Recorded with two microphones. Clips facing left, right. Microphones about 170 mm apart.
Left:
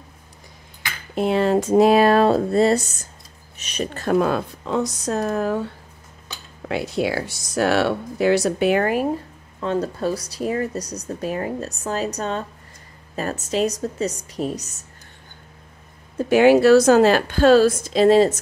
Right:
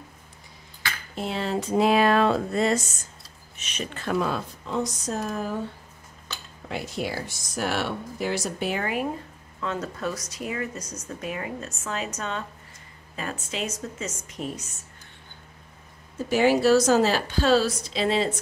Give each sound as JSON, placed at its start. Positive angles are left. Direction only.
{"t": 1.1, "sound": "speech", "side_deg": 55}
{"t": 4.6, "sound": "speech", "side_deg": 75}
{"t": 6.7, "sound": "speech", "side_deg": 80}
{"t": 8.8, "sound": "speech", "side_deg": 40}
{"t": 16.3, "sound": "a woman's voice", "side_deg": 60}